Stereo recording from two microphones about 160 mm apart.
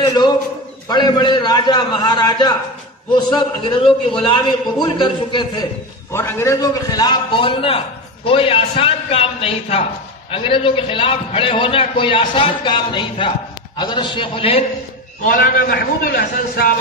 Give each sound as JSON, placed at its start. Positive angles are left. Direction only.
{"t": 0.0, "sound": "a man's voice", "side_deg": 25}
{"t": 6.1, "sound": "a man's voice", "side_deg": 15}
{"t": 15.2, "sound": "a man's voice", "side_deg": 60}